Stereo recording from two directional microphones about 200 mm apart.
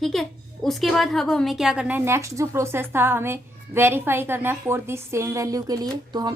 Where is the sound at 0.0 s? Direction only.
Centre (ahead or behind).